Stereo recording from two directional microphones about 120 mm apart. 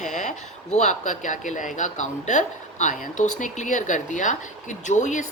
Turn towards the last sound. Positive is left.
turn(degrees=90)